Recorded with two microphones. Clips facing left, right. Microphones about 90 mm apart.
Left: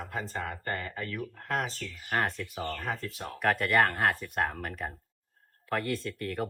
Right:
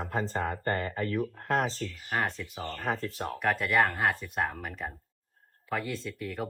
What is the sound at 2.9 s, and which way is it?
Speech, 40° right (ahead or behind).